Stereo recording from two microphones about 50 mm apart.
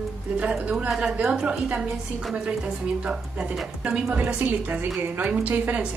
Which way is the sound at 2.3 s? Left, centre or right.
Right.